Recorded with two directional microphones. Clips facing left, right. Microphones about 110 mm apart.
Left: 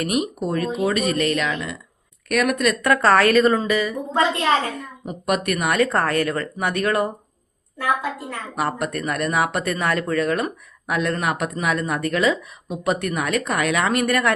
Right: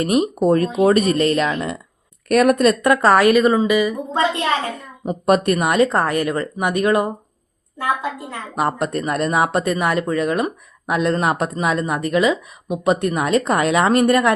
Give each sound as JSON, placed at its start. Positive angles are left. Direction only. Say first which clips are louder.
{"t": 0.0, "sound": "speech", "louder": "right 5 dB", "side_deg": -30}
{"t": 0.4, "sound": "speech", "louder": "right 10 dB", "side_deg": -40}
{"t": 2.8, "sound": "speech", "louder": "right 1 dB", "side_deg": -15}
{"t": 5.0, "sound": "speech", "louder": "right 7 dB", "side_deg": -35}